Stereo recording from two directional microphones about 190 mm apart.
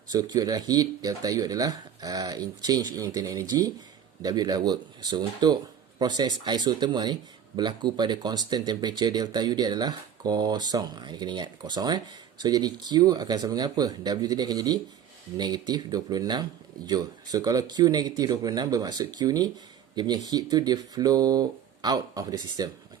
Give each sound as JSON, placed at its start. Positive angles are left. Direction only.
{"t": 0.1, "sound": "speech", "side_deg": -20}